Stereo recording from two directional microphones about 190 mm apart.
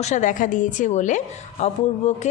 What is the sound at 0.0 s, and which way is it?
Speech, 40° left (ahead or behind).